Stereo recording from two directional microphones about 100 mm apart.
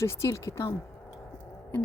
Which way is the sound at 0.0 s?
30° left (ahead or behind).